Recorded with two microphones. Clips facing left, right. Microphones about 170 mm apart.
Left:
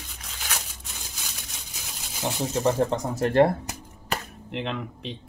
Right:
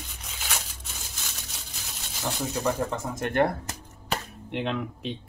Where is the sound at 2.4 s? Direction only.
25° left (ahead or behind).